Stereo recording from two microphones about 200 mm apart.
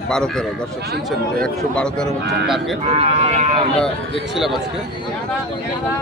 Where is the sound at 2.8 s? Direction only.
30° right (ahead or behind).